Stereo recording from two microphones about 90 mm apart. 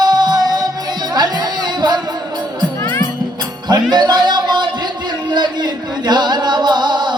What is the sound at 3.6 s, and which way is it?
Music, 50° right (ahead or behind).